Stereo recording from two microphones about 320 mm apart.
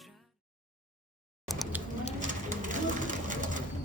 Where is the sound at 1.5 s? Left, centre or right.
Centre.